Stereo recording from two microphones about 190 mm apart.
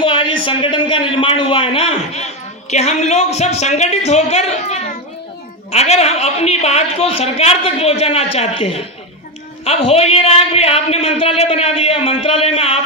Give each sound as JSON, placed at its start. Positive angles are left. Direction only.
{"t": 0.0, "sound": "a man's voice", "side_deg": 25}